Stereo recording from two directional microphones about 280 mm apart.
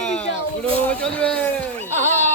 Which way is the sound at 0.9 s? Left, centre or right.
Centre.